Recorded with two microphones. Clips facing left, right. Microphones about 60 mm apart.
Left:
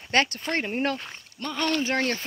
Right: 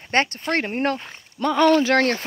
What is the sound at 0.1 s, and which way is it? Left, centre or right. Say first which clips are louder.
Speech: right 3 dB; right.